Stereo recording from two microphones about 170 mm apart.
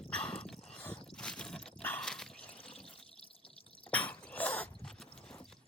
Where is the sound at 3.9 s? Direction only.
10° left (ahead or behind).